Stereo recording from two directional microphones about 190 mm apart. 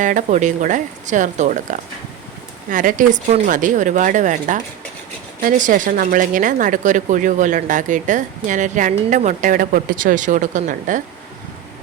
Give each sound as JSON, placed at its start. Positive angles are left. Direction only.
{"t": 0.0, "sound": "a woman's voice", "side_deg": -40}